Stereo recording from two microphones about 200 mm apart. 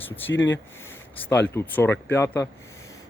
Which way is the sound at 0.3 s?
70° left (ahead or behind).